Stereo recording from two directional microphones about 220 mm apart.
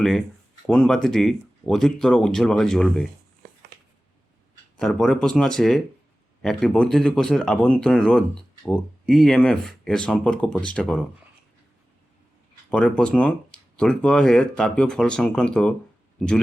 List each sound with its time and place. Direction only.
0.7 s speech: 5° left (ahead or behind)
4.8 s speech: centre (ahead or behind)
12.7 s speech: 5° left (ahead or behind)